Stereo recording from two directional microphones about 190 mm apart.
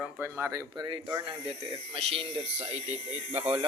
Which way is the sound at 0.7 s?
20° right (ahead or behind).